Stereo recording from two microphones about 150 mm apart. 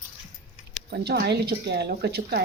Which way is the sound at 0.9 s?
90° right.